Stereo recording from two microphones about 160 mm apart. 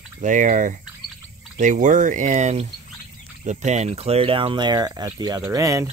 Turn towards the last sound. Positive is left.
turn(degrees=-20)  # may be behind; listen again after turning